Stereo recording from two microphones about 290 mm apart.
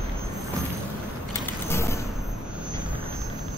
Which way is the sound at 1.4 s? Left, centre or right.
Centre.